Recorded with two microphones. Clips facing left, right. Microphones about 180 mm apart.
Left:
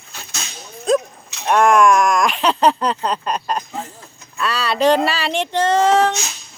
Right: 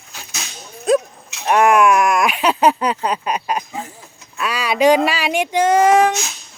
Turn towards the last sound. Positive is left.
turn(degrees=-10)  # may be behind; listen again after turning